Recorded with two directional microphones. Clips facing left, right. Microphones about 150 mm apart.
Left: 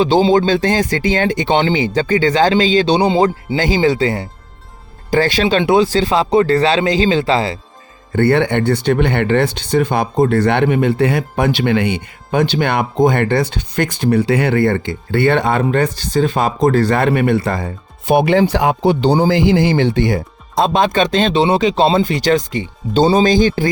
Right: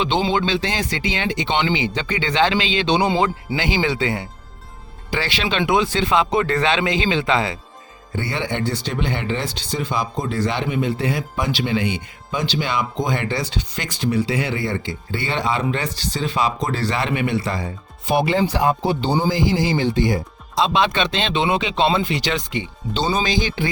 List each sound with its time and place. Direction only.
0.0 s speech: 35° left (ahead or behind)
8.1 s speech: 60° left (ahead or behind)